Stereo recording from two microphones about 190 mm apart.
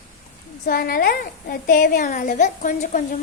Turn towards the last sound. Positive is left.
turn(degrees=45)  # may be behind; listen again after turning